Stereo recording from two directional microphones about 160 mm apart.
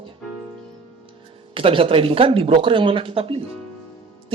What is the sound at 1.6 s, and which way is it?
Speech, 35° right (ahead or behind).